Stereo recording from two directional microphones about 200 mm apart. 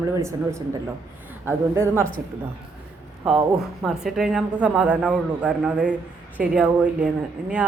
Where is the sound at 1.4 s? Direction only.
10° right (ahead or behind).